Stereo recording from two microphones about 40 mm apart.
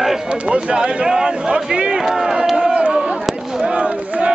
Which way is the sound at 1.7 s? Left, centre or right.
Right.